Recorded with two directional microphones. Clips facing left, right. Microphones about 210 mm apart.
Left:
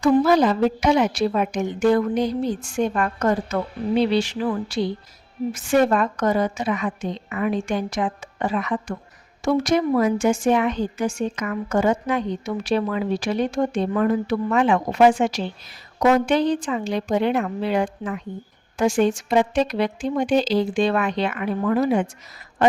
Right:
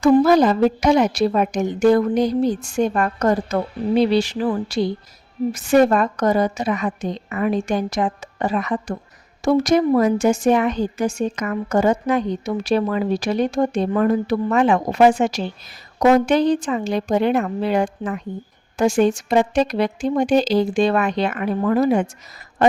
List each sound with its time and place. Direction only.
0.0 s a woman's voice: 45° right (ahead or behind)